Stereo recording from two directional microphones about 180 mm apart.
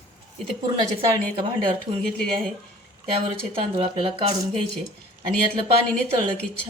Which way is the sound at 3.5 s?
30° right (ahead or behind).